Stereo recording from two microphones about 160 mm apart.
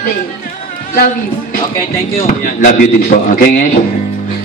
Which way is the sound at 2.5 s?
60° left (ahead or behind).